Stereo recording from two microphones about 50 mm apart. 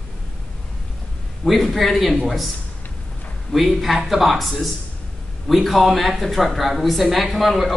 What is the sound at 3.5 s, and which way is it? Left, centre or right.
Speech, centre.